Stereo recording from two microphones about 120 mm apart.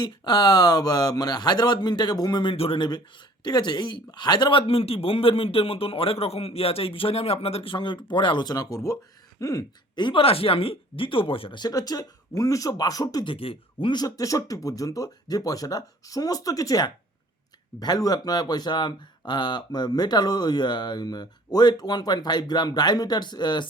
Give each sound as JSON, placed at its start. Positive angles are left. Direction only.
{"t": 0.0, "sound": "speech", "side_deg": 35}
{"t": 13.3, "sound": "speech", "side_deg": 50}
{"t": 14.0, "sound": "speech", "side_deg": 30}